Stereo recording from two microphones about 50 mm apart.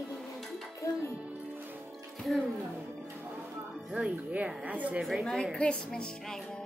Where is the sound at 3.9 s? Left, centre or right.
Right.